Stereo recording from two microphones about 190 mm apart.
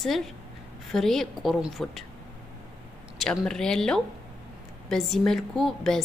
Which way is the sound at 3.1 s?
Centre (ahead or behind).